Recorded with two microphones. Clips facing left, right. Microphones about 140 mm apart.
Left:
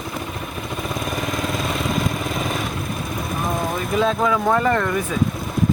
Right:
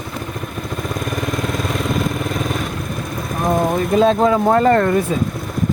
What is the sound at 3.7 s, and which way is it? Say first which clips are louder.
Speech: right 5 dB; 35° right (ahead or behind).